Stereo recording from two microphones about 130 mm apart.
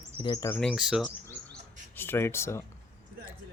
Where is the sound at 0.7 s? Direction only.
5° right (ahead or behind).